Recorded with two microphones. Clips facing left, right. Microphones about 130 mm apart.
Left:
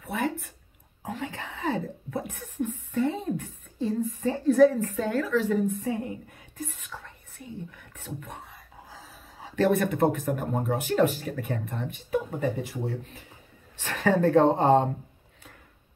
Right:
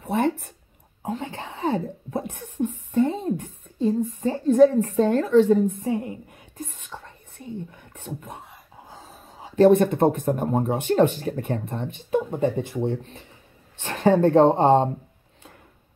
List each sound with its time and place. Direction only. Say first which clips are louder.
0.0 s a sound: right 6 dB; 25° right (ahead or behind)
6.6 s whispering: right 1 dB; 25° right (ahead or behind)
8.8 s dog: right 4 dB; 25° right (ahead or behind)
9.6 s speech: right 7 dB; 25° right (ahead or behind)